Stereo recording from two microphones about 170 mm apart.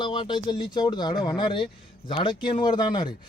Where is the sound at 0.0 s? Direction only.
25° left (ahead or behind).